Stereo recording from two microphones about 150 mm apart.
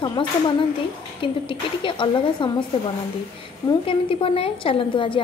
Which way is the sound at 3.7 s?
35° left (ahead or behind).